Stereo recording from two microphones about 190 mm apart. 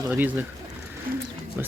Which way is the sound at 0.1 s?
5° right (ahead or behind).